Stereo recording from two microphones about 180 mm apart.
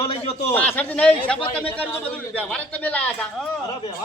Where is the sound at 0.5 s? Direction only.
10° left (ahead or behind).